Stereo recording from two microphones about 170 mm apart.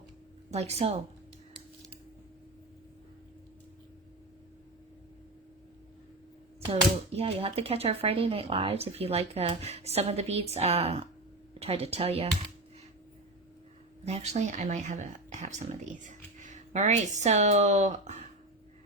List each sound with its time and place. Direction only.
0.5 s speech: 40° right (ahead or behind)
7.2 s speech: 35° right (ahead or behind)
14.0 s speech: 40° right (ahead or behind)